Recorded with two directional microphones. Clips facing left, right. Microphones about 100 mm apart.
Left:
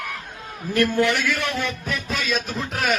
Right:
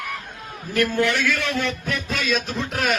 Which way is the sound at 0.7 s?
20° left (ahead or behind).